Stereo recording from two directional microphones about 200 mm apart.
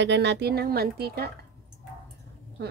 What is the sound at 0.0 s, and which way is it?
Speech, 60° right (ahead or behind).